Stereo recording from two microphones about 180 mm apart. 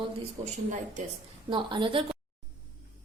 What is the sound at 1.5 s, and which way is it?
Speech, 25° right (ahead or behind).